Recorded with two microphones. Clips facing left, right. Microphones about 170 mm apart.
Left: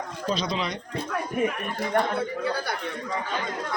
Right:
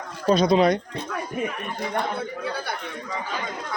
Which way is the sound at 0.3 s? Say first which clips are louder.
Right 11 dB; 50° right (ahead or behind).